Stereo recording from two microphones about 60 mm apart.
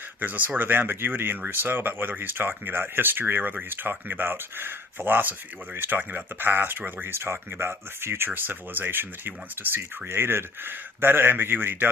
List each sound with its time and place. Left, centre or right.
0.2 s speech: right